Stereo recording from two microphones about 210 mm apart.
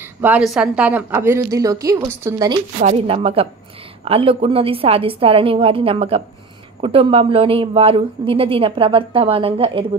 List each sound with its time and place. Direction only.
0.2 s a woman's voice: 5° right (ahead or behind)
2.8 s speech: 30° right (ahead or behind)